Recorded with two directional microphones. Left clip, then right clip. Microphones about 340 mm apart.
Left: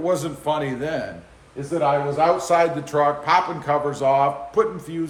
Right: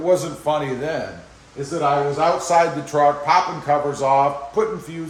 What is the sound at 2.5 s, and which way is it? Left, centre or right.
A man's voice, centre.